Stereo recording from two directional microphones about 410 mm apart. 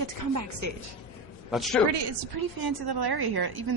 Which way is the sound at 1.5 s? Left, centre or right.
Centre.